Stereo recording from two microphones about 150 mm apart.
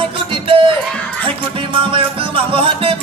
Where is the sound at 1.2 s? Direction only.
35° right (ahead or behind).